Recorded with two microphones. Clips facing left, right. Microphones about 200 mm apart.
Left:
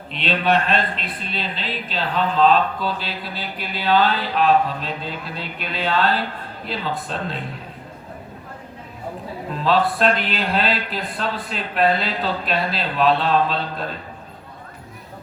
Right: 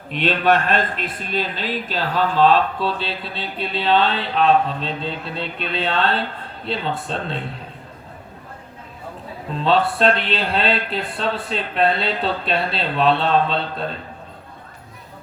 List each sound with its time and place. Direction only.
0.1 s a man's voice: 45° right (ahead or behind)
2.5 s mantra: 30° right (ahead or behind)
9.6 s mantra: 30° right (ahead or behind)